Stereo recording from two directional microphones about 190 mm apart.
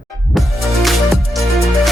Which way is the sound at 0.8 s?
Centre (ahead or behind).